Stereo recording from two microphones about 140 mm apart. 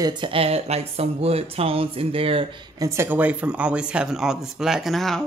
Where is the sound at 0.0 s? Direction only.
40° right (ahead or behind).